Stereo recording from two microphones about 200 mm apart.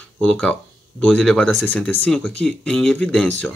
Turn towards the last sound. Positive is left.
turn(degrees=5)  # may be behind; listen again after turning